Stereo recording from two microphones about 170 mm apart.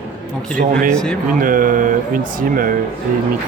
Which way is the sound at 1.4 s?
55° right (ahead or behind).